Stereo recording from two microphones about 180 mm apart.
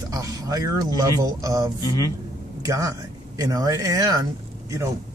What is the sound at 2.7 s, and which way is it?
Speech, 20° right (ahead or behind).